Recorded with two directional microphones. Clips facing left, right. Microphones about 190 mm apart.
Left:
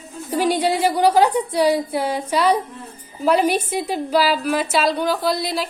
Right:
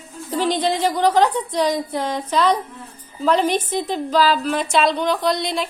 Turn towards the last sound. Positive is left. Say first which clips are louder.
# even
turn(degrees=5)  # may be behind; listen again after turning